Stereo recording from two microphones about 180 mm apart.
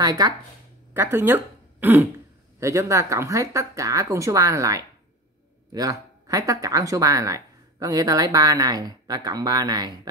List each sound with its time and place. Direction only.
0.0 s speech: 20° right (ahead or behind)